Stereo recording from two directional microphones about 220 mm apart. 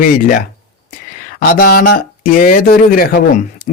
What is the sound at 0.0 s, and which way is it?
Speech, 40° left (ahead or behind).